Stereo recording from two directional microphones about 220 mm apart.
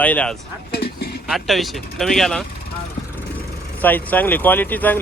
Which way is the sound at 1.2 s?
Centre (ahead or behind).